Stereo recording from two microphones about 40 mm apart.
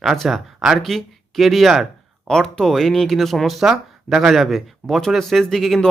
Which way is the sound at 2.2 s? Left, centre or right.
Centre.